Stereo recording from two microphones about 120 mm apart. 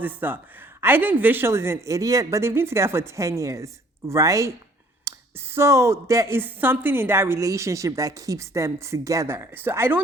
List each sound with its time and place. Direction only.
0.0 s a man's voice: 15° right (ahead or behind)